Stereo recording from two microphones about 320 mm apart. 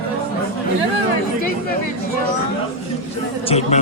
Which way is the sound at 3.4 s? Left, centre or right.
Centre.